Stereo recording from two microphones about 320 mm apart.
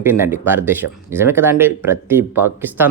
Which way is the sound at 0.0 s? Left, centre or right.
Centre.